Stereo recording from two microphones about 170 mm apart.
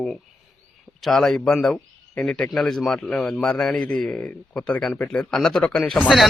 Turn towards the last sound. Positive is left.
turn(degrees=5)  # may be behind; listen again after turning